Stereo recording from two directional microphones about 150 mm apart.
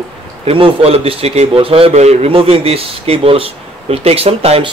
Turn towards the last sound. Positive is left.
turn(degrees=-40)  # may be behind; listen again after turning